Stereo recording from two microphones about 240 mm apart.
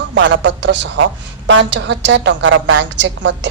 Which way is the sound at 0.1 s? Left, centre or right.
Right.